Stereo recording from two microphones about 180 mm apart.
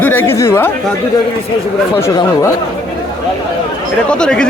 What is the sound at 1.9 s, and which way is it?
Speech, 15° left (ahead or behind).